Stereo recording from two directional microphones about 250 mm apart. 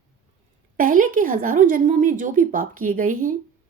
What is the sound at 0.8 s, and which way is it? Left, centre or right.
A woman's voice, right.